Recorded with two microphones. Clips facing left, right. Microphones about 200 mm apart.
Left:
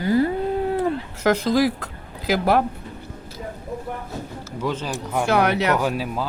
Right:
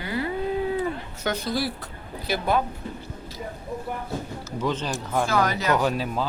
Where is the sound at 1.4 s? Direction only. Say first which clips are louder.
Left 8 dB; 90° left.